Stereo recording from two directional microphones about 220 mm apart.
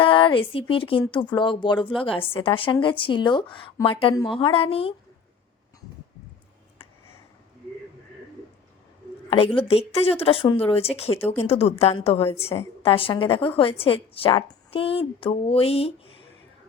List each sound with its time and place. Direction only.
0.0 s speech: 25° left (ahead or behind)
9.3 s speech: 25° left (ahead or behind)